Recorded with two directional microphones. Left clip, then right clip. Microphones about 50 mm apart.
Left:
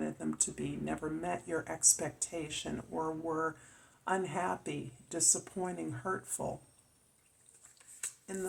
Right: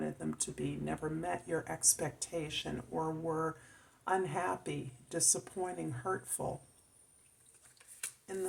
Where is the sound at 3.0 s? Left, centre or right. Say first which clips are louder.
Left 1 dB; left.